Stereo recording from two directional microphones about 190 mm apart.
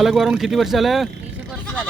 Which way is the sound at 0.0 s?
Centre (ahead or behind).